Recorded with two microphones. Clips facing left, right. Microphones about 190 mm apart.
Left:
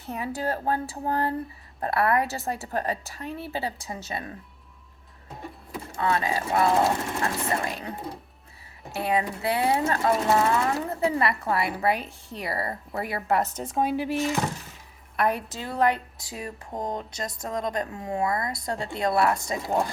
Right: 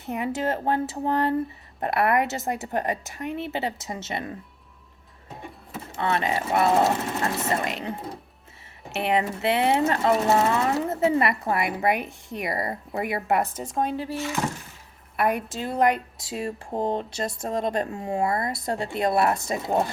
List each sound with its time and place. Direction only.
0.0 s speech: 20° right (ahead or behind)
5.7 s speech: 25° right (ahead or behind)
13.6 s speech: 5° left (ahead or behind)
15.1 s a sound: 5° right (ahead or behind)
15.5 s speech: 20° right (ahead or behind)